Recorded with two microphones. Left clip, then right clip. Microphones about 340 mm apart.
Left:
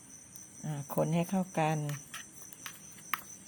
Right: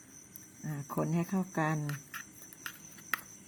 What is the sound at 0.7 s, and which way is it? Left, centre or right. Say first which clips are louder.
Cricket: left 3 dB; centre.